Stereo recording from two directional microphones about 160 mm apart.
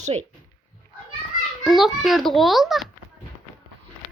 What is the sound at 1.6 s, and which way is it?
A child's voice, centre (ahead or behind).